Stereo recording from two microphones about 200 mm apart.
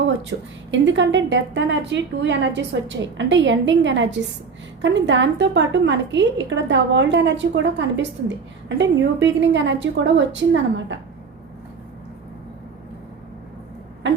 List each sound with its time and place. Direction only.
0.2 s a woman's voice: 65° right (ahead or behind)